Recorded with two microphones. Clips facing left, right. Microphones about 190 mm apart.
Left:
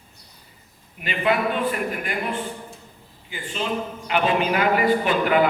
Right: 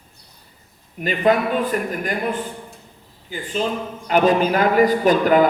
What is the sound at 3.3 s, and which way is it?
A man's voice, 40° right (ahead or behind).